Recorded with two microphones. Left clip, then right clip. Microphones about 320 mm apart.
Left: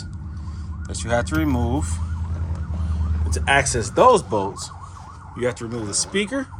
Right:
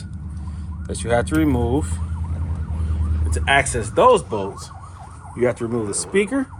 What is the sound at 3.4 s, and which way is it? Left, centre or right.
Speech, centre.